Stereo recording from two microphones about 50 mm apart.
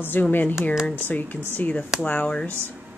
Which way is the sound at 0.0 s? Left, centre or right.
Left.